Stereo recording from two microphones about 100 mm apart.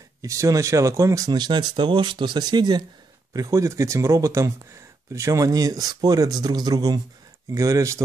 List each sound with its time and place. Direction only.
0.2 s speech: 30° right (ahead or behind)
3.3 s speech: 30° right (ahead or behind)